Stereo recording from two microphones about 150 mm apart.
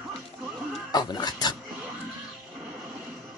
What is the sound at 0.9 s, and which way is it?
Dog, 30° left (ahead or behind).